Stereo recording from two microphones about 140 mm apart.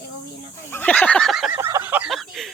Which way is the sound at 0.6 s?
15° left (ahead or behind).